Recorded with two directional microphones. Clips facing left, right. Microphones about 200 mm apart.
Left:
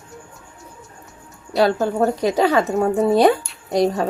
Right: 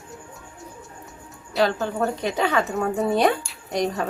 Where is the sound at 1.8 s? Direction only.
40° left (ahead or behind).